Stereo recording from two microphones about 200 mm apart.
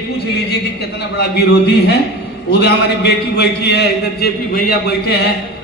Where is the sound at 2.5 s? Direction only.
55° left (ahead or behind).